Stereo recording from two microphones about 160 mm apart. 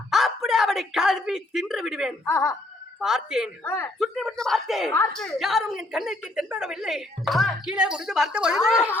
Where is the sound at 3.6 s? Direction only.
15° left (ahead or behind).